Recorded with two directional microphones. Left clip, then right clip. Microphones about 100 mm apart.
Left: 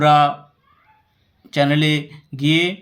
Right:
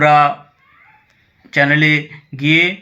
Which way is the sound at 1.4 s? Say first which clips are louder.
Right 5 dB; 15° left (ahead or behind).